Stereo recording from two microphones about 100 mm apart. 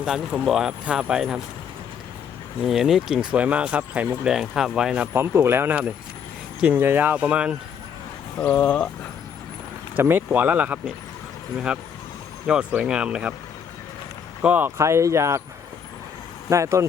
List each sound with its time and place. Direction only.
0.0 s speech: 10° right (ahead or behind)
2.6 s speech: 5° right (ahead or behind)
3.3 s speech: 15° right (ahead or behind)
5.1 s speech: 25° right (ahead or behind)
8.4 s speech: 15° left (ahead or behind)
10.0 s speech: 20° right (ahead or behind)
12.5 s speech: 10° right (ahead or behind)
14.4 s speech: 15° right (ahead or behind)
14.8 s speech: 30° right (ahead or behind)
16.5 s speech: 30° right (ahead or behind)